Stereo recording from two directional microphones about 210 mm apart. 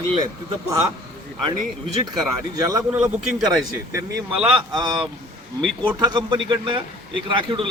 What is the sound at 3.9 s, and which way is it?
Speech, 10° right (ahead or behind).